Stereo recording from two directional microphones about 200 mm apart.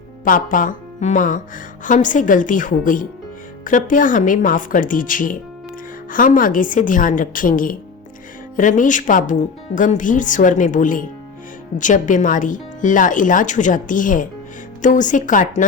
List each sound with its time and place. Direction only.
0.3 s a woman's voice: 45° left (ahead or behind)